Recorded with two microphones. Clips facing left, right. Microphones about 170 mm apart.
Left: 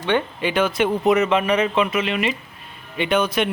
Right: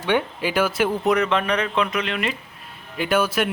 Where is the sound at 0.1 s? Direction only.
5° right (ahead or behind).